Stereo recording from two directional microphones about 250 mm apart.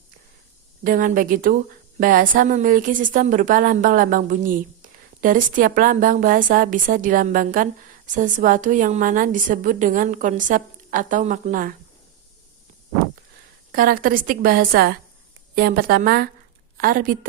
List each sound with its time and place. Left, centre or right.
0.9 s a woman's voice: right
13.7 s a woman's voice: right